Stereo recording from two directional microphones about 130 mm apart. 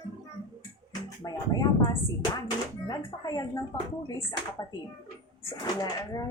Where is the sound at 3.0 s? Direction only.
25° left (ahead or behind).